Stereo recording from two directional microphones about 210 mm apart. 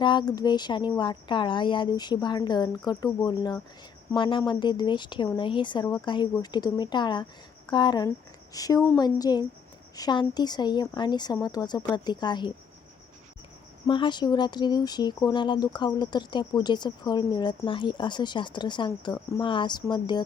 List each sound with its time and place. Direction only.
0.0 s a woman's voice: 20° left (ahead or behind)
13.8 s speech: 20° left (ahead or behind)